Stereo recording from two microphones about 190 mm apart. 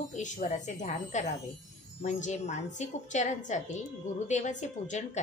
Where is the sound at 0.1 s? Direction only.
40° left (ahead or behind).